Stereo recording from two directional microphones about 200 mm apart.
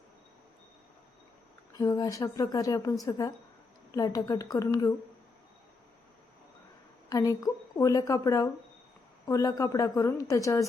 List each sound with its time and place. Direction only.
1.7 s a woman's voice: 20° left (ahead or behind)
7.1 s a woman's voice: 15° left (ahead or behind)